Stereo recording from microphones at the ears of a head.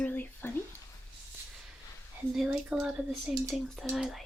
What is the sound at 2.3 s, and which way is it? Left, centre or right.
Speech, centre.